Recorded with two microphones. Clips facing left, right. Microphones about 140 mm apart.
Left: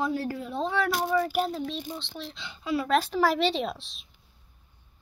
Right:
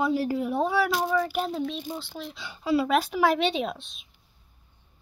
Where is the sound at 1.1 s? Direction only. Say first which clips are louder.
Even; centre (ahead or behind).